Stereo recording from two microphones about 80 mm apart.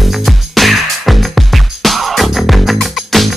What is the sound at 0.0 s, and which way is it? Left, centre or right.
Music, centre.